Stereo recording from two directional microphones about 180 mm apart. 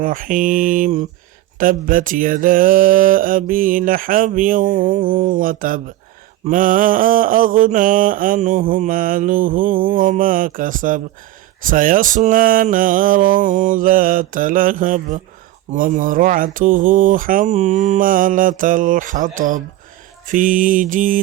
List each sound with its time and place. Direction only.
0.0 s mantra: 50° right (ahead or behind)